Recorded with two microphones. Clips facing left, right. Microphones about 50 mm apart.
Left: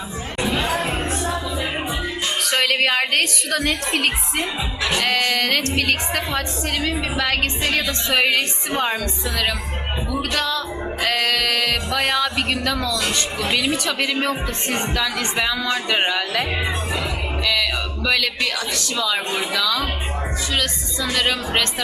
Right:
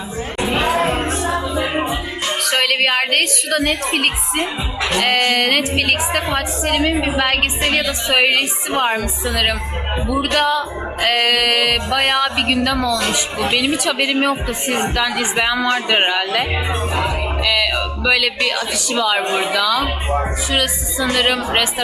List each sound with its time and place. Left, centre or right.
0.8 s music: right
2.6 s a woman's voice: centre
6.7 s a woman's voice: centre
17.4 s music: centre
19.5 s speech: centre
20.5 s a woman's voice: centre